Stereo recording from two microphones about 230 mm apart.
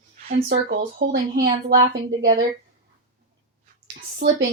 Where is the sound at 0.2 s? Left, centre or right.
Right.